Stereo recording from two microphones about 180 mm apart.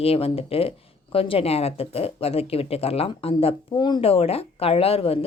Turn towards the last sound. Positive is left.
turn(degrees=30)  # may be behind; listen again after turning